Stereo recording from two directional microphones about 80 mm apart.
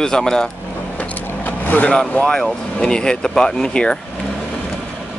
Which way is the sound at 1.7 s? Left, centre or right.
Centre.